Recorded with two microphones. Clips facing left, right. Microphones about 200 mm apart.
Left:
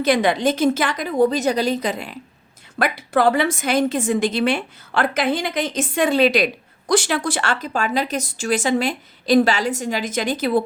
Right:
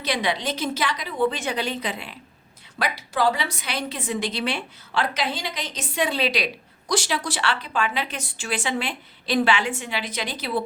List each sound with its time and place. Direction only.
0.0 s a woman's voice: 50° left (ahead or behind)
2.7 s a woman's voice: 55° left (ahead or behind)